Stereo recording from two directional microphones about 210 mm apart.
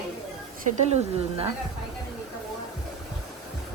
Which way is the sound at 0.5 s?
30° right (ahead or behind).